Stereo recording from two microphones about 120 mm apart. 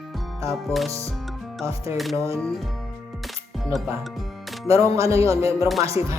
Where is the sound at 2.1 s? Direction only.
25° right (ahead or behind).